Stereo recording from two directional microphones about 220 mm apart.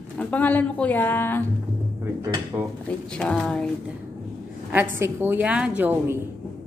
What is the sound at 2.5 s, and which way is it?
Speech, 10° right (ahead or behind).